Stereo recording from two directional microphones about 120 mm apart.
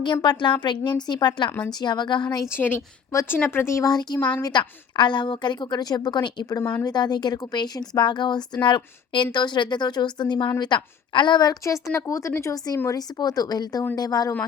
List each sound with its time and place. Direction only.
0.0 s a woman's voice: 40° left (ahead or behind)
2.6 s a woman's voice: 15° left (ahead or behind); by 14.3 s 30° left (ahead or behind)